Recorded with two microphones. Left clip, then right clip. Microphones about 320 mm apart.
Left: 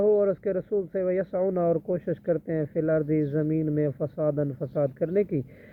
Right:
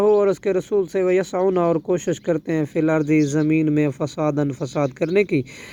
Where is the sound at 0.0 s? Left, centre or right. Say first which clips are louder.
Right 6 dB; centre.